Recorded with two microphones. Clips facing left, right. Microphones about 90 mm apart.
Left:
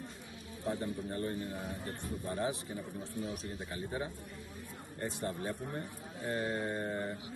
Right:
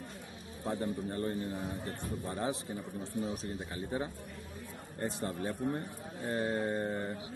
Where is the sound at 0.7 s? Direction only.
30° right (ahead or behind).